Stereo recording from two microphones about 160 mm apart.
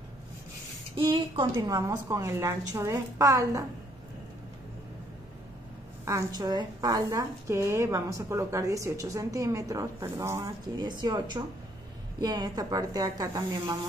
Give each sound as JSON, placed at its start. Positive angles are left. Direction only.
{"t": 0.9, "sound": "a woman's voice", "side_deg": -30}
{"t": 6.0, "sound": "a woman's voice", "side_deg": -20}